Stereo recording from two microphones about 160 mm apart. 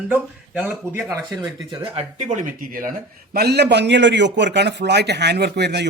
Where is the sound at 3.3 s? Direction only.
90° right.